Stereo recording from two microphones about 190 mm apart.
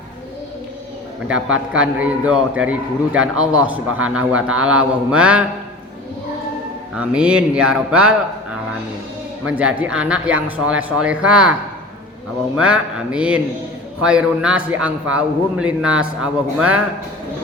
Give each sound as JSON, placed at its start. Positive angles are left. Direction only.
{"t": 1.7, "sound": "a man's voice", "side_deg": -5}
{"t": 6.9, "sound": "a man's voice", "side_deg": -5}
{"t": 9.4, "sound": "a man's voice", "side_deg": -5}
{"t": 12.5, "sound": "a man's voice", "side_deg": -5}